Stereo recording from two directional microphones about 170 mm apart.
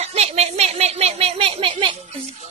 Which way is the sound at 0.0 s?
40° right (ahead or behind).